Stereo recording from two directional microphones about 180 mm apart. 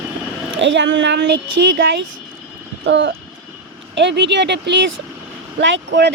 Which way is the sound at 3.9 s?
75° right (ahead or behind).